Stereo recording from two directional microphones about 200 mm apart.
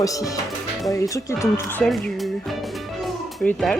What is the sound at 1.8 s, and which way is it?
Speech, 5° left (ahead or behind).